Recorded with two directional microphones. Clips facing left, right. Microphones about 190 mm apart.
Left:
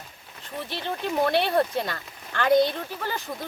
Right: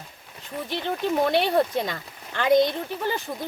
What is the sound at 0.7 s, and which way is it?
Speech, 15° right (ahead or behind).